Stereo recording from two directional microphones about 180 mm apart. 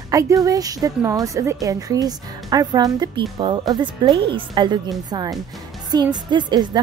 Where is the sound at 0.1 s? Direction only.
20° right (ahead or behind).